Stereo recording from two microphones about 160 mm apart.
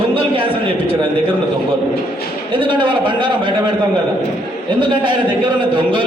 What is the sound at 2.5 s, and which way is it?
A man's voice, 30° right (ahead or behind).